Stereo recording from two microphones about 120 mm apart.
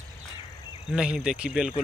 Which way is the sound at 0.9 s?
5° right (ahead or behind).